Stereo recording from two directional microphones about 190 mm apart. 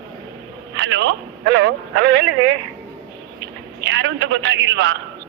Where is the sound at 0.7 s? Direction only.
70° right (ahead or behind).